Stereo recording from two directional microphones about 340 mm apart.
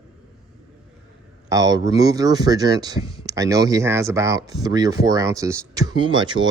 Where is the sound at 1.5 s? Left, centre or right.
Centre.